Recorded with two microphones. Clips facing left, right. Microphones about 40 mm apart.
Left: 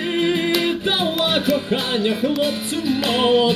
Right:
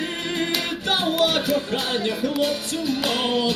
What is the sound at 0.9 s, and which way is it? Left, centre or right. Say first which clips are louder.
Music: left 1 dB; left.